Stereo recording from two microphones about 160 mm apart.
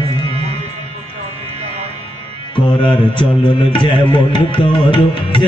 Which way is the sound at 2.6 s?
30° left (ahead or behind).